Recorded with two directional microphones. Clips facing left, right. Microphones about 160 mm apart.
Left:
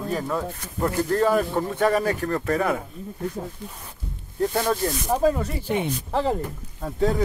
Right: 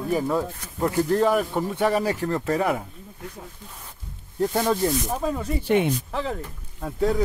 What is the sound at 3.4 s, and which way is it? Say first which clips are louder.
Speech: left 8 dB; 30° left (ahead or behind).